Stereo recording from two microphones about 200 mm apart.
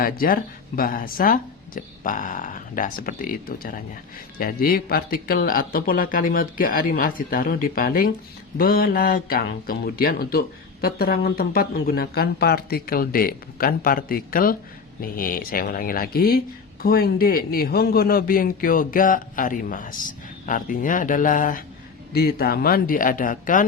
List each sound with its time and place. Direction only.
0.0 s speech: 45° left (ahead or behind)